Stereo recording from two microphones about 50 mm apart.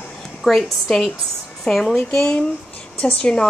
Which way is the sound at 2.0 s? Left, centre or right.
Centre.